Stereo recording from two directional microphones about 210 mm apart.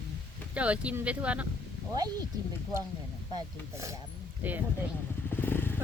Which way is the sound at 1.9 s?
20° right (ahead or behind).